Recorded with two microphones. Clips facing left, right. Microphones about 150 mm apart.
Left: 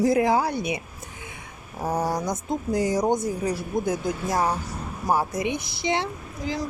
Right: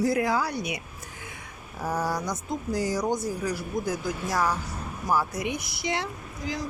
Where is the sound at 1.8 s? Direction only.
20° left (ahead or behind).